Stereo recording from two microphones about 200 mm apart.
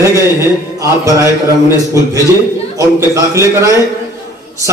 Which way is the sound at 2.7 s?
15° right (ahead or behind).